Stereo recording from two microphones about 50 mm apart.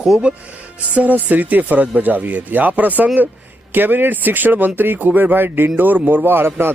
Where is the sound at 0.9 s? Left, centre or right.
Right.